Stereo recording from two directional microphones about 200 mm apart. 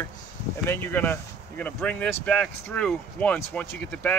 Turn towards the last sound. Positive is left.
turn(degrees=10)  # may be behind; listen again after turning